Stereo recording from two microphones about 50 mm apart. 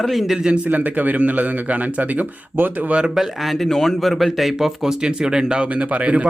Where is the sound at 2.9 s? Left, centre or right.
Centre.